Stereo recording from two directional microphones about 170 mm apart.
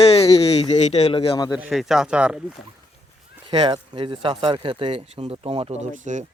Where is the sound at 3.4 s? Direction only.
25° right (ahead or behind); by 6.2 s 45° right (ahead or behind).